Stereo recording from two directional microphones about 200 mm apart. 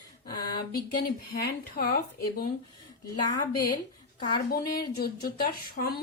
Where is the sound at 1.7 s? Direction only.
45° left (ahead or behind).